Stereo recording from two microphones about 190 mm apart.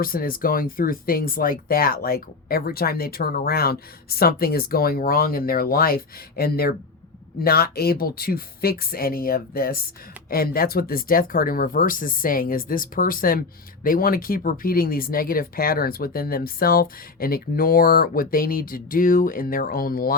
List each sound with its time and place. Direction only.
0.0 s speech: 50° left (ahead or behind)